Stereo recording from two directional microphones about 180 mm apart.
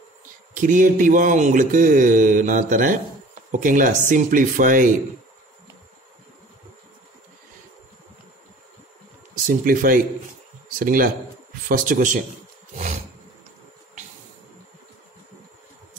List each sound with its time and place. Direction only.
0.6 s speech: 50° right (ahead or behind)
9.3 s speech: 50° right (ahead or behind)